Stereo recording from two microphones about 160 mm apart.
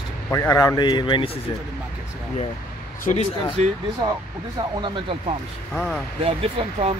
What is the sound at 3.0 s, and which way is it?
Speech, 50° left (ahead or behind).